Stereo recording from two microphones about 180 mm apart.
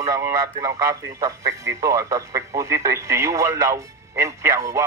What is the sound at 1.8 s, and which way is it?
Speech, 20° right (ahead or behind).